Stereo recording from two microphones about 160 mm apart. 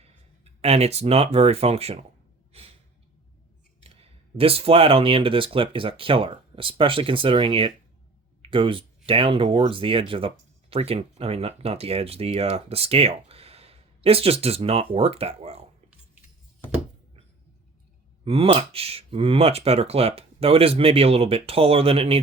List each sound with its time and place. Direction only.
0.0 s speech: 40° right (ahead or behind)
2.5 s gasp: 40° right (ahead or behind)
3.8 s speech: 35° right (ahead or behind)
18.3 s speech: 35° right (ahead or behind)